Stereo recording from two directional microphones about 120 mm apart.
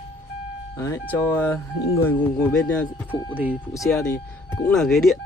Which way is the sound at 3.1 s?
15° right (ahead or behind).